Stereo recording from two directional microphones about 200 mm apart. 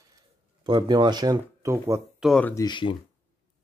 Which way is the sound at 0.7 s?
20° right (ahead or behind).